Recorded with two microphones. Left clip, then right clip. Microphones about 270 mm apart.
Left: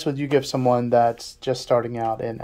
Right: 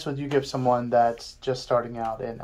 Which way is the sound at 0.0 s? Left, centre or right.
Left.